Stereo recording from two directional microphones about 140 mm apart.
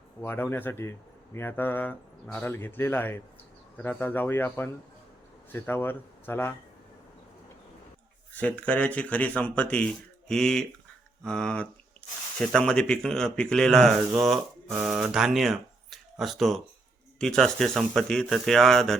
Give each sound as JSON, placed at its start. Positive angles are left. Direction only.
{"t": 0.2, "sound": "speech", "side_deg": 15}
{"t": 8.4, "sound": "speech", "side_deg": 10}